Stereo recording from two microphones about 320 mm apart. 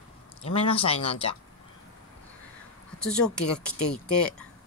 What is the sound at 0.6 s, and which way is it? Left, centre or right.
Speech, centre.